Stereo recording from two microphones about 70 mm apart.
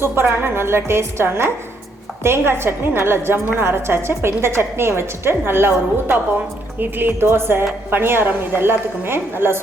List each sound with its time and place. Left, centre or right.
0.0 s a woman's voice: right